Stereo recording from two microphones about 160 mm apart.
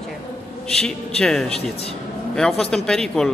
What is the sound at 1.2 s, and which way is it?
Speech, 5° left (ahead or behind).